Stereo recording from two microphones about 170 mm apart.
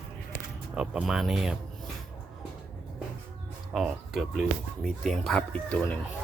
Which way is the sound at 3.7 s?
5° right (ahead or behind).